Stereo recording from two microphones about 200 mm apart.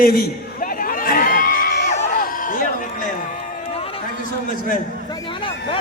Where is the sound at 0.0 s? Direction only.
45° left (ahead or behind).